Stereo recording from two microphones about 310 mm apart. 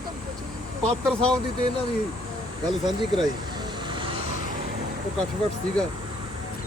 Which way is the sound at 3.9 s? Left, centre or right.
Centre.